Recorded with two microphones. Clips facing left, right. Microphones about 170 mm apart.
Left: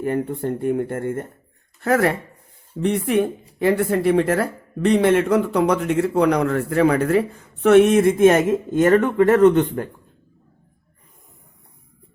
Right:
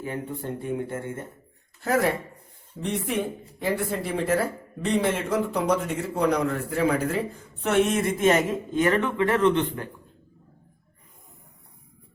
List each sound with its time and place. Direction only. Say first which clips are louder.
0.0 s speech: left 9 dB; 60° left (ahead or behind)